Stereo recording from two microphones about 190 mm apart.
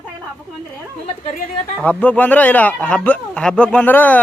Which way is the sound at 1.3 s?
45° left (ahead or behind).